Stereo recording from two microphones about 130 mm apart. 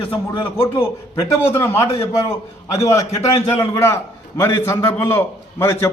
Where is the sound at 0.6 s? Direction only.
20° left (ahead or behind).